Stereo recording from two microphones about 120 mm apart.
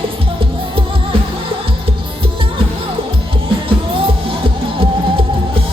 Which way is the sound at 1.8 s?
45° right (ahead or behind).